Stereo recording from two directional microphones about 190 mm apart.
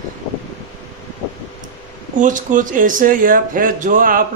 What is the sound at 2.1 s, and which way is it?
Speech, 45° right (ahead or behind).